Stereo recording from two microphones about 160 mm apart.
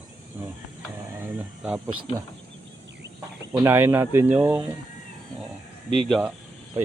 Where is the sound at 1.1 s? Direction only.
10° right (ahead or behind).